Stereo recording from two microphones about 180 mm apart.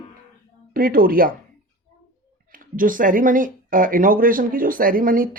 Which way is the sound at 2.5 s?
50° right (ahead or behind).